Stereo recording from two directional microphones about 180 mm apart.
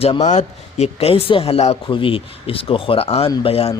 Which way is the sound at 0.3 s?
40° left (ahead or behind).